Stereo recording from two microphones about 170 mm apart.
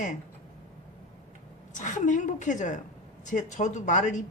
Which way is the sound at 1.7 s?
45° left (ahead or behind).